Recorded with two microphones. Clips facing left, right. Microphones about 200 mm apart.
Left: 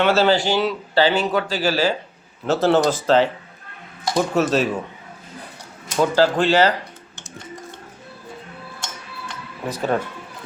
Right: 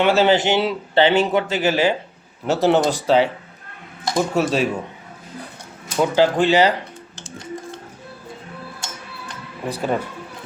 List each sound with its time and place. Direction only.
0.0 s speech: 15° right (ahead or behind)
6.0 s speech: 15° right (ahead or behind)
9.6 s speech: 10° right (ahead or behind)